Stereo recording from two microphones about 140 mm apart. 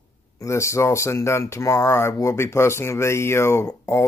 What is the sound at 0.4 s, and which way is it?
Speech, 20° left (ahead or behind).